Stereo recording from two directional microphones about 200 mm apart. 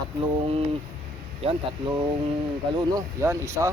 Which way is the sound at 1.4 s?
25° right (ahead or behind).